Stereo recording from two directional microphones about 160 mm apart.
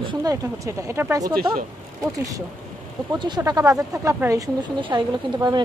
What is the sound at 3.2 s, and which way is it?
Speech, 25° right (ahead or behind).